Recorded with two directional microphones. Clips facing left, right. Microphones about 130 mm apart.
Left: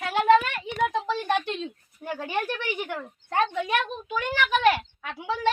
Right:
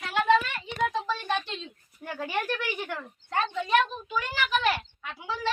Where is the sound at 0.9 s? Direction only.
55° left (ahead or behind).